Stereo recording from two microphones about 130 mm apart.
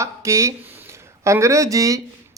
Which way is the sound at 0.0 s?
25° right (ahead or behind).